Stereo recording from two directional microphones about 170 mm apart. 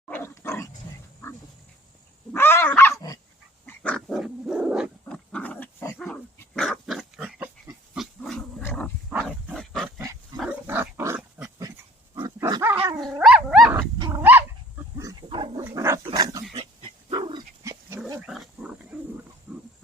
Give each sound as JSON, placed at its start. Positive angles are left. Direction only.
{"t": 0.1, "sound": "dog", "side_deg": 15}
{"t": 2.3, "sound": "dog", "side_deg": 15}
{"t": 5.0, "sound": "pig", "side_deg": 5}
{"t": 6.0, "sound": "dog", "side_deg": 0}
{"t": 7.9, "sound": "wild animals", "side_deg": 0}
{"t": 8.6, "sound": "dog", "side_deg": 5}
{"t": 10.7, "sound": "pig", "side_deg": -15}
{"t": 12.1, "sound": "pig", "side_deg": -25}
{"t": 12.6, "sound": "dog", "side_deg": -10}
{"t": 14.0, "sound": "dog", "side_deg": -15}
{"t": 14.9, "sound": "pig", "side_deg": -25}
{"t": 15.6, "sound": "dog", "side_deg": -15}
{"t": 18.2, "sound": "pig", "side_deg": -5}